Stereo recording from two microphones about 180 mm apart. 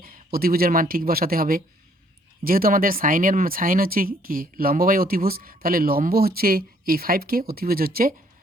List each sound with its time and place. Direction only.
0.0 s speech: 55° right (ahead or behind)